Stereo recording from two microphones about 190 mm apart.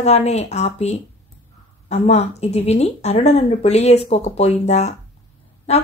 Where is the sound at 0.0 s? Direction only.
35° left (ahead or behind).